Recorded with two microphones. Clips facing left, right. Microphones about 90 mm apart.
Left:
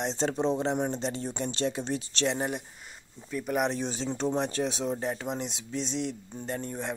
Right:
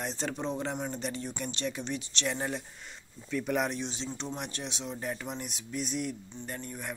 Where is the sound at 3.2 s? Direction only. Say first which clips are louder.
Left 2 dB; 15° left (ahead or behind).